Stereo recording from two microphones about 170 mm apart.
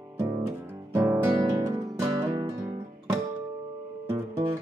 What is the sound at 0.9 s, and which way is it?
Music, 15° right (ahead or behind).